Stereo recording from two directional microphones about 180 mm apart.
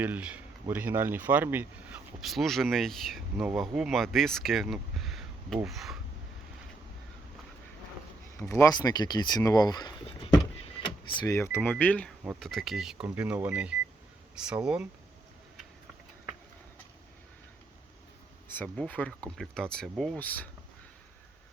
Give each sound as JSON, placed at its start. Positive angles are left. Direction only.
{"t": 0.0, "sound": "speech", "side_deg": -10}
{"t": 8.4, "sound": "speech", "side_deg": 15}
{"t": 10.8, "sound": "power windows", "side_deg": 25}
{"t": 11.3, "sound": "speech", "side_deg": 15}
{"t": 18.4, "sound": "speech", "side_deg": 10}